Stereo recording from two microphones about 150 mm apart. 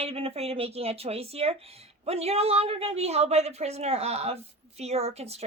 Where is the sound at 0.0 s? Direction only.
40° right (ahead or behind).